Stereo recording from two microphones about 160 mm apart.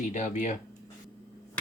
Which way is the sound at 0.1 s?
50° left (ahead or behind).